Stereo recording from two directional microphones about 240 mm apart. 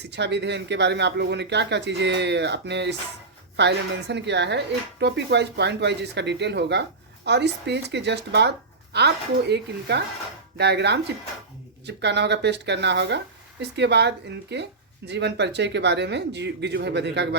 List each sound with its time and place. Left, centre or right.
0.0 s speech: right